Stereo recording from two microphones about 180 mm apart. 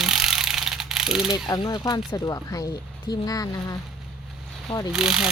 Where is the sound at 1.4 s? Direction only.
25° left (ahead or behind).